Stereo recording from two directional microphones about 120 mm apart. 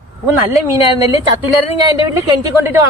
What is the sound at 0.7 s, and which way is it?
Speech, 25° right (ahead or behind).